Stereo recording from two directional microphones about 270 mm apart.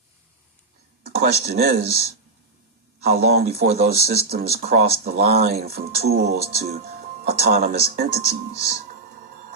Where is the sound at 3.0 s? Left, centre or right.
Right.